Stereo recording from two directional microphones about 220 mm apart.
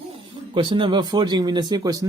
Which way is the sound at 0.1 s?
25° right (ahead or behind).